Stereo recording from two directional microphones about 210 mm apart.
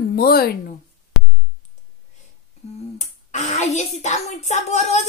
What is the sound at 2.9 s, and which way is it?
Speech, 35° left (ahead or behind).